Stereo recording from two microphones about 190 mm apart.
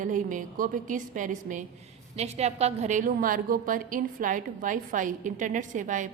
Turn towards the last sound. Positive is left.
turn(degrees=-40)  # may be behind; listen again after turning